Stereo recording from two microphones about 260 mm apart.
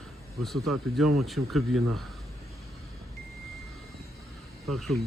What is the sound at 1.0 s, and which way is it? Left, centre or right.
Speech, right.